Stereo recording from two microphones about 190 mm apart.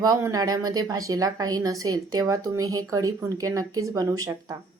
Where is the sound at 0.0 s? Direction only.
20° right (ahead or behind).